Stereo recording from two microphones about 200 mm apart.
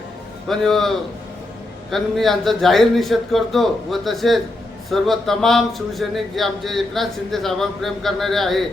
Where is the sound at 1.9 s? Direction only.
Centre (ahead or behind).